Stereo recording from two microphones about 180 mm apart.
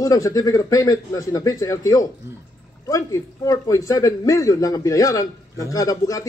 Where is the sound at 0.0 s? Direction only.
20° left (ahead or behind).